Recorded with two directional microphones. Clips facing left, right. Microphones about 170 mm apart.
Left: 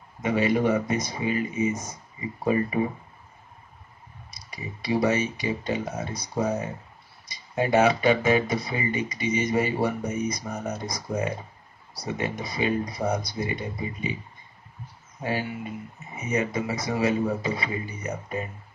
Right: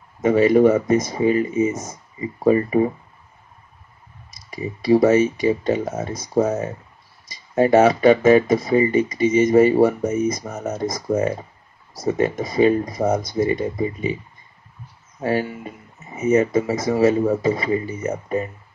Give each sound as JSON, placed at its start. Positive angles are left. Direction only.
{"t": 0.2, "sound": "speech", "side_deg": -45}
{"t": 4.3, "sound": "speech", "side_deg": -45}
{"t": 15.2, "sound": "speech", "side_deg": -40}